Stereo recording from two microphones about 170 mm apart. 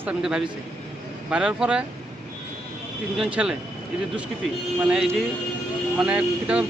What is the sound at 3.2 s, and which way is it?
Speech, 5° right (ahead or behind).